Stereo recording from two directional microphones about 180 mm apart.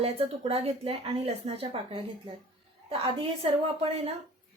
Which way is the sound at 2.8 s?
30° right (ahead or behind).